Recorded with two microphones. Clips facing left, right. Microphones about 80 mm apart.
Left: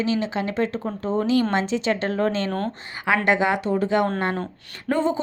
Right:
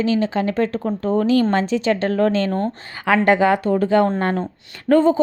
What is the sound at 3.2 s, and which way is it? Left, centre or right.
A woman's voice, centre.